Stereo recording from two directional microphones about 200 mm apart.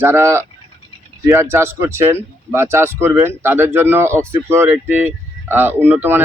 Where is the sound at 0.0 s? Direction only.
10° right (ahead or behind).